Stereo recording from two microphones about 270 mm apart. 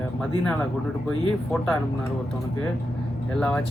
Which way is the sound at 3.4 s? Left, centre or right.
Centre.